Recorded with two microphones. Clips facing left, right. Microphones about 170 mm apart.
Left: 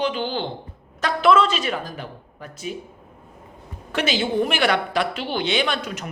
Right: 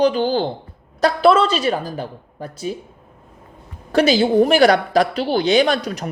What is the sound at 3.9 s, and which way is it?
A man's voice, 35° right (ahead or behind).